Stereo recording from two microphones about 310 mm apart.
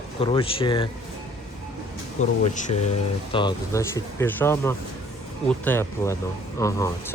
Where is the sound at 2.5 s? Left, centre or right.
Left.